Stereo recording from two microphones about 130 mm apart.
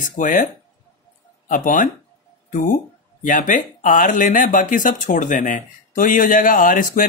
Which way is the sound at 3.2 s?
80° left.